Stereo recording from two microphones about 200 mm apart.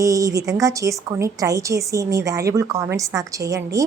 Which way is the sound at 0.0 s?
15° right (ahead or behind).